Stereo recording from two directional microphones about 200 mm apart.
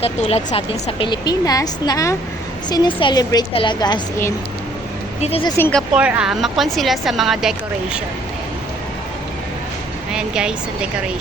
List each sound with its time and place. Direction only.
0.0 s a woman's voice: 30° left (ahead or behind)
5.5 s speech: 10° left (ahead or behind)
5.9 s a woman's voice: 5° right (ahead or behind)
10.1 s speech: 5° right (ahead or behind)